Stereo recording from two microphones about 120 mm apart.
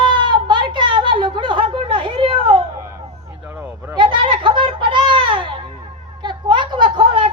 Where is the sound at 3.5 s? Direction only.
20° right (ahead or behind).